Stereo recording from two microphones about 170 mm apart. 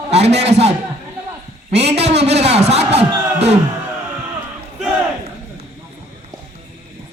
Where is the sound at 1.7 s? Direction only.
40° right (ahead or behind).